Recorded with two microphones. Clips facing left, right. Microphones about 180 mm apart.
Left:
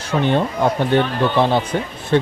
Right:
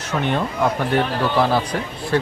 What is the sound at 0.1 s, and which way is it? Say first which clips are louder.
Speech: left 4 dB; 30° left (ahead or behind).